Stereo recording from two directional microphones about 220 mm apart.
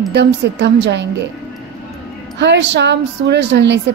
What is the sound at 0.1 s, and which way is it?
Speech, 50° right (ahead or behind).